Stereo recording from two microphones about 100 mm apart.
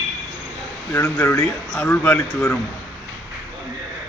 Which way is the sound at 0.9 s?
25° left (ahead or behind).